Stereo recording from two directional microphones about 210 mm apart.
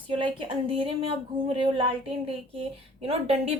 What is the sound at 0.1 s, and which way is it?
A woman's voice, 25° right (ahead or behind).